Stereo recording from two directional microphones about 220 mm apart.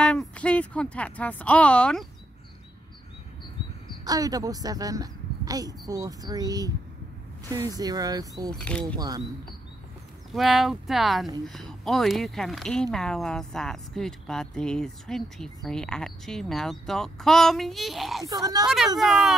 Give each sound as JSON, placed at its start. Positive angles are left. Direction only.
{"t": 0.0, "sound": "speech", "side_deg": 5}
{"t": 4.0, "sound": "speech", "side_deg": -15}
{"t": 8.5, "sound": "speech", "side_deg": 5}
{"t": 8.9, "sound": "speech", "side_deg": -15}
{"t": 10.3, "sound": "speech", "side_deg": 0}
{"t": 18.2, "sound": "speech", "side_deg": -15}
{"t": 18.9, "sound": "speech", "side_deg": 0}